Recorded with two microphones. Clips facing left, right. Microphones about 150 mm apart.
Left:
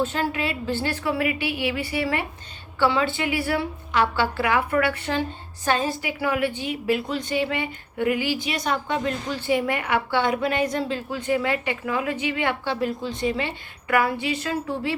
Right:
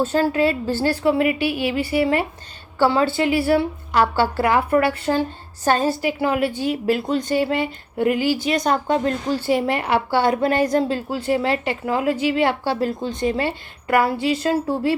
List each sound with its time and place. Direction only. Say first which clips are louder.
0.0 s a woman's voice: right 7 dB; 35° right (ahead or behind)
3.9 s speech: right 4 dB; 40° right (ahead or behind)
4.7 s a woman's voice: right 5 dB; 30° right (ahead or behind)
6.1 s a woman's voice: right 4 dB; 30° right (ahead or behind)